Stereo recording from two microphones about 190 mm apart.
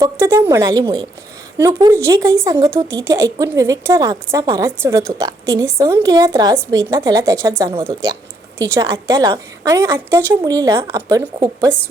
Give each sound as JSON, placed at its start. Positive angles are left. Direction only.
{"t": 0.0, "sound": "a woman's voice", "side_deg": -15}